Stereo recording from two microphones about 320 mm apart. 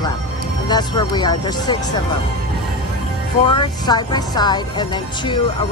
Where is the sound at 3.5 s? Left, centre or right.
Centre.